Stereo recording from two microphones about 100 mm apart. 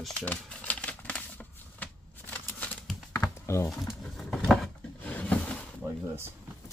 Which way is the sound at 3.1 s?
25° left (ahead or behind).